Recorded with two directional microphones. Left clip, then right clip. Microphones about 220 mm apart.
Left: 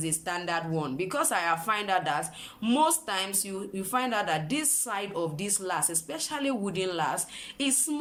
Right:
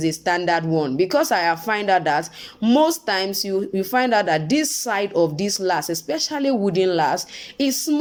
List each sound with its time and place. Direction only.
0.0 s speech: 30° right (ahead or behind)